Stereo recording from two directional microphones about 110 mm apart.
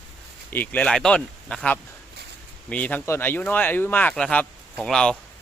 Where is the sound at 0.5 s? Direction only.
15° left (ahead or behind).